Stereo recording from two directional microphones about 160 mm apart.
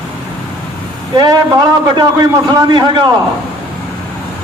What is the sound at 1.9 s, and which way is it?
A man's voice, 25° right (ahead or behind).